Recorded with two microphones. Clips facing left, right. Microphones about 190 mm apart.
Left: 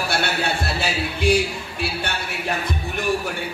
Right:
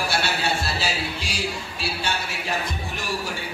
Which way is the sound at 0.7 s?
55° left (ahead or behind).